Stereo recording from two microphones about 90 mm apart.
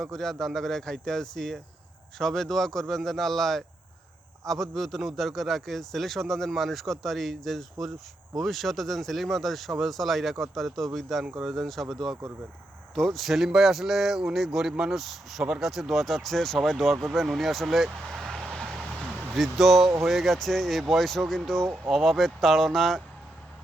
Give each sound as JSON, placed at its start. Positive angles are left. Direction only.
{"t": 0.0, "sound": "a man's voice", "side_deg": 5}
{"t": 19.0, "sound": "a sound", "side_deg": -20}
{"t": 19.4, "sound": "a man's voice", "side_deg": 0}